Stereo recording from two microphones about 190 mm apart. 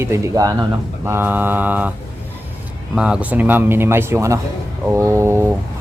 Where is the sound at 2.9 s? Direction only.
5° right (ahead or behind).